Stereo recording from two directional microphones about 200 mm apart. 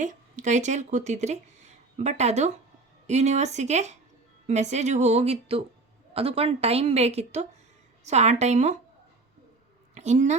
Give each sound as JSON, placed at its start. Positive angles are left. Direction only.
{"t": 0.0, "sound": "a woman's voice", "side_deg": -40}
{"t": 9.9, "sound": "a woman's voice", "side_deg": -35}